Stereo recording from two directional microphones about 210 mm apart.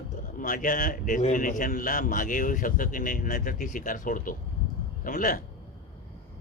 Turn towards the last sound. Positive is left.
turn(degrees=40)  # may be behind; listen again after turning